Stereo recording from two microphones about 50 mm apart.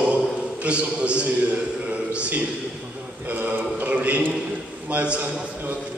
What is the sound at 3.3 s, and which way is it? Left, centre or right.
A man's voice, right.